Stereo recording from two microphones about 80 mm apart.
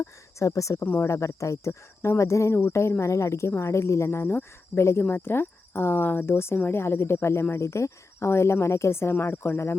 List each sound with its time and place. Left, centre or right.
0.0 s speech: left